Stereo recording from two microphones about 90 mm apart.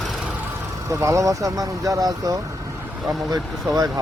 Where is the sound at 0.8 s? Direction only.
35° right (ahead or behind).